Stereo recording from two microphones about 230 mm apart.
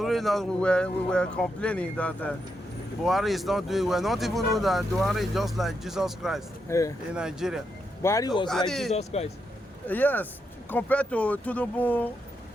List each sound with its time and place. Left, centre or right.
0.0 s speech: centre
6.7 s speech: centre
7.1 s speech: centre
8.0 s speech: centre
8.4 s speech: centre
8.9 s speech: left
9.8 s speech: centre